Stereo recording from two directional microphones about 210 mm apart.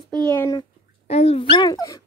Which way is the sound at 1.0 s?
30° left (ahead or behind).